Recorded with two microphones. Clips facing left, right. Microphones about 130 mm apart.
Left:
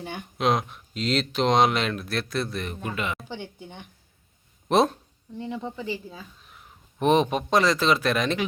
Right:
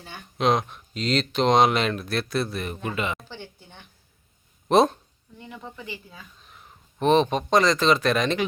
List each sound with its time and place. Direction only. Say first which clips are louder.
0.0 s speech: left 7 dB; 15° left (ahead or behind)
0.3 s speech: right 2 dB; 5° left (ahead or behind)
3.2 s speech: left 5 dB; 15° left (ahead or behind)
4.7 s speech: right 2 dB; centre (ahead or behind)
5.4 s speech: left 7 dB; 30° left (ahead or behind)
6.4 s a sound: right 1 dB; 5° left (ahead or behind)
7.0 s speech: right 1 dB; 10° left (ahead or behind)